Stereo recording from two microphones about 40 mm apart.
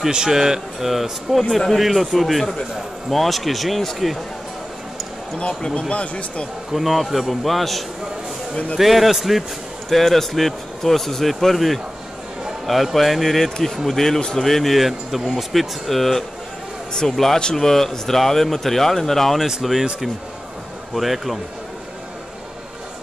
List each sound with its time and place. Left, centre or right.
0.1 s speech: centre
5.4 s speech: centre
6.7 s speech: centre
19.6 s speech: centre
20.9 s speech: centre